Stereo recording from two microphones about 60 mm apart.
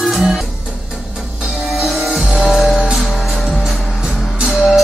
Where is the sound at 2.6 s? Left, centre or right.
Centre.